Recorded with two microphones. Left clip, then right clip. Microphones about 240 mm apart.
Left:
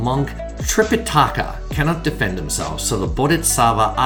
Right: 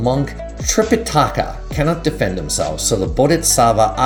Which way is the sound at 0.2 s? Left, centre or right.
Centre.